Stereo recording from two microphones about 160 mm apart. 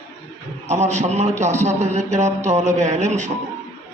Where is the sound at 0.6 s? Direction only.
45° right (ahead or behind).